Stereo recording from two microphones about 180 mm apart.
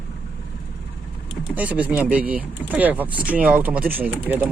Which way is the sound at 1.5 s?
10° right (ahead or behind).